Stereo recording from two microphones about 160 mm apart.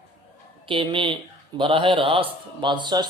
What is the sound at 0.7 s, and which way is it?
A man's voice, 30° right (ahead or behind).